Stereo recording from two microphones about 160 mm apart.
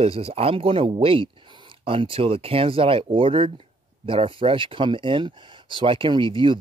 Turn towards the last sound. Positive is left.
turn(degrees=-30)  # may be behind; listen again after turning